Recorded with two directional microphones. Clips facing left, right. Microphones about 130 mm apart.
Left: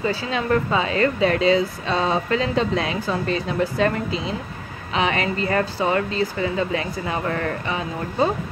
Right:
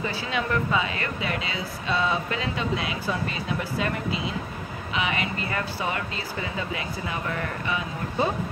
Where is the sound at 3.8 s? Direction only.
30° left (ahead or behind); by 7.5 s 45° left (ahead or behind).